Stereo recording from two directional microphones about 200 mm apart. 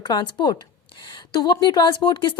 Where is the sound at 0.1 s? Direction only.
20° left (ahead or behind).